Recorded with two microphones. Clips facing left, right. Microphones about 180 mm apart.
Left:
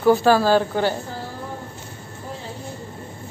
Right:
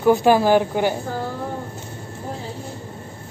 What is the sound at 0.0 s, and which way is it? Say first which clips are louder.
Speech: right 1 dB; 15° right (ahead or behind).